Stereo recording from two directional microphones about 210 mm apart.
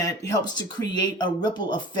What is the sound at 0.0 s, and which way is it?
Speech, 15° left (ahead or behind).